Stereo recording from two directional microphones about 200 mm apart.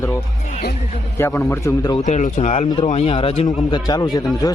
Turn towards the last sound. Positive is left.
turn(degrees=20)  # may be behind; listen again after turning